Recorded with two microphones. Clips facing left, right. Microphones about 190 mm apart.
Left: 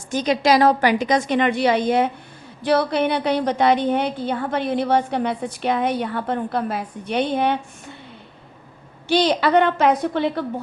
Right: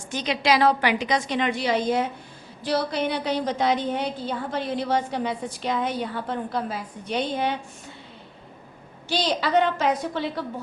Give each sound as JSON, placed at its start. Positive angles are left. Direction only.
{"t": 0.1, "sound": "a woman's voice", "side_deg": 45}
{"t": 9.0, "sound": "a woman's voice", "side_deg": 60}